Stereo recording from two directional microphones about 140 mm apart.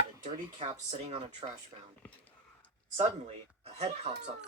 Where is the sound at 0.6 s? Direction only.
45° right (ahead or behind).